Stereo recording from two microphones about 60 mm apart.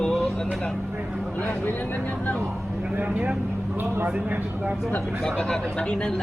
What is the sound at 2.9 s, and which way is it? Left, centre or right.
Speech, right.